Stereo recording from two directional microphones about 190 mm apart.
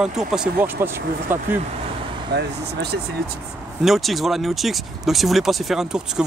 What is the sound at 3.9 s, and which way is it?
Speech, centre (ahead or behind).